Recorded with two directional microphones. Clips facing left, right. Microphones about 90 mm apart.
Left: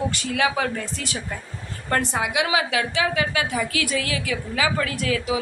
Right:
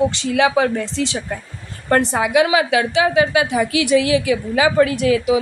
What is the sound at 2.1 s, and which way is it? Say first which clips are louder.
Speech: right 7 dB; 35° right (ahead or behind).